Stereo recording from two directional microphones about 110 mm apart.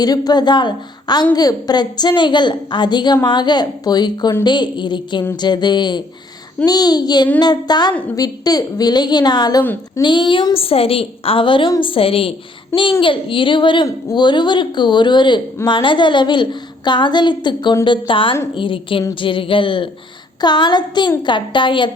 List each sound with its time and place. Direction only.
0.0 s a woman's voice: 35° left (ahead or behind)